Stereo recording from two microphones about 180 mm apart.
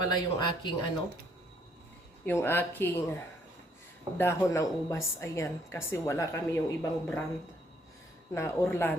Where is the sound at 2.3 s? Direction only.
10° left (ahead or behind).